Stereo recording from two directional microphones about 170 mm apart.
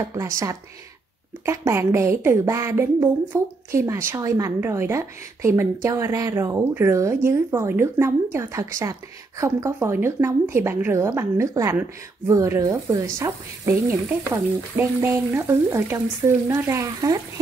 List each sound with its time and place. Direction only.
0.0 s a woman's voice: 20° right (ahead or behind)